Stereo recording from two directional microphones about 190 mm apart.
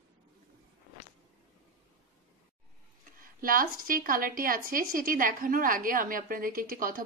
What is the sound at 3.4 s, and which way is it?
A woman's voice, 50° right (ahead or behind).